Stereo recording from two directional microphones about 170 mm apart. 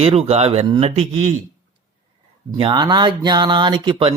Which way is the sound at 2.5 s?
30° right (ahead or behind).